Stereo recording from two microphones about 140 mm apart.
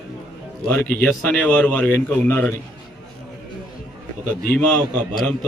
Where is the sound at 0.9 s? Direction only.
10° left (ahead or behind).